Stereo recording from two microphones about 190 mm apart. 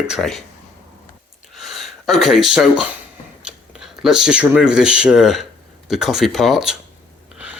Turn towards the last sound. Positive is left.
turn(degrees=0)  # may be behind; listen again after turning